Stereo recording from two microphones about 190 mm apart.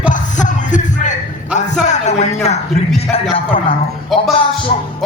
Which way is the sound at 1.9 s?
35° left (ahead or behind).